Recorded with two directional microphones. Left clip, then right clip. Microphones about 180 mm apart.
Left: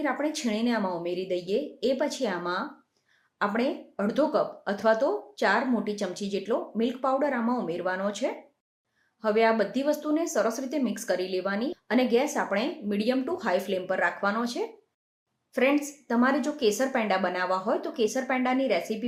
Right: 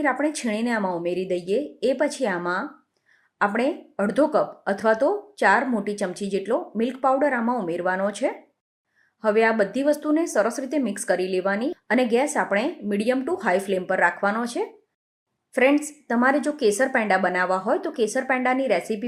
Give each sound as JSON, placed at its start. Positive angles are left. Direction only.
{"t": 0.0, "sound": "a woman's voice", "side_deg": -45}